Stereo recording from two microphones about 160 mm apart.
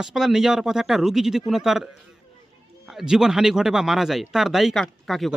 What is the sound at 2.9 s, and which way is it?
Speech, centre (ahead or behind).